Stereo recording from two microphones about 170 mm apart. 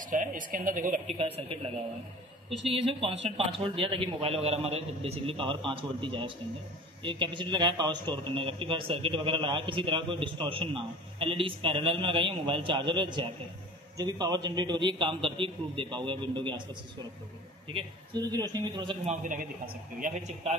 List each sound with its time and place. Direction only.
0.0 s a man's voice: 50° right (ahead or behind)
1.1 s a man's voice: 30° right (ahead or behind)
17.7 s a man's voice: 25° right (ahead or behind)
19.0 s a man's voice: 50° right (ahead or behind)